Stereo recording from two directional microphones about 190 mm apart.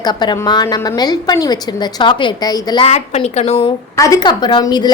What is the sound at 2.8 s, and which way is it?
Speech, 35° left (ahead or behind).